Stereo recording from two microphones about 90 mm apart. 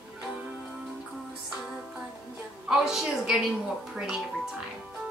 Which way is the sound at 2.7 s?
5° right (ahead or behind).